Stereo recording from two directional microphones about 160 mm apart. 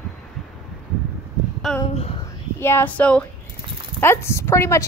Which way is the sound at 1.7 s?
5° left (ahead or behind).